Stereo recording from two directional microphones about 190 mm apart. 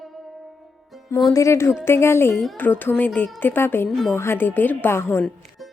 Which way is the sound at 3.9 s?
Centre (ahead or behind).